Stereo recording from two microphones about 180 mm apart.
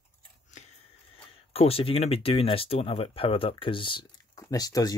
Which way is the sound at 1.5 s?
35° left (ahead or behind).